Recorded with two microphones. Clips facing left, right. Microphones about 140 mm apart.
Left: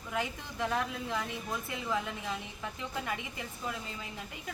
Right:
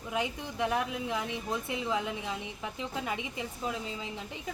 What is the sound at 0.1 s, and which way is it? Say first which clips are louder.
A woman's voice: right 2 dB; 15° right (ahead or behind).